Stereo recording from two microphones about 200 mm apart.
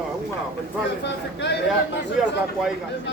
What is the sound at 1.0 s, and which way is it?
Speech, 60° left (ahead or behind).